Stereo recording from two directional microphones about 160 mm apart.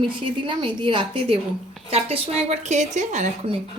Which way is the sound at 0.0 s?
30° right (ahead or behind).